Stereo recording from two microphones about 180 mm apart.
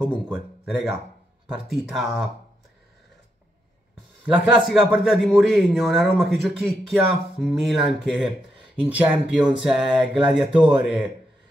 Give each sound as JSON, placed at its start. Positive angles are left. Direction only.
{"t": 0.0, "sound": "speech", "side_deg": 0}
{"t": 4.5, "sound": "speech", "side_deg": 0}